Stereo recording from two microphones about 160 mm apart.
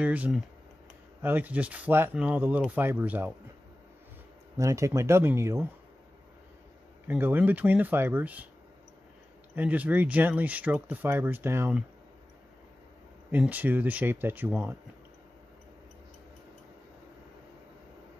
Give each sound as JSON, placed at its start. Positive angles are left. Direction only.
{"t": 0.0, "sound": "speech", "side_deg": -10}
{"t": 4.6, "sound": "speech", "side_deg": -20}
{"t": 7.1, "sound": "speech", "side_deg": -10}
{"t": 9.6, "sound": "speech", "side_deg": -10}
{"t": 13.3, "sound": "speech", "side_deg": -10}